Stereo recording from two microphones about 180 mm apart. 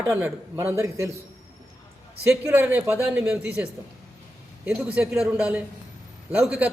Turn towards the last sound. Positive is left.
turn(degrees=-10)  # may be behind; listen again after turning